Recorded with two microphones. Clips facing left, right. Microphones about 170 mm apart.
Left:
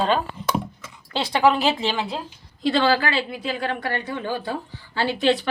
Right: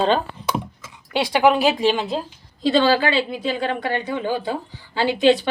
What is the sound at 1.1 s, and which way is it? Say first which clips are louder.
A woman's voice: right 2 dB; 15° right (ahead or behind).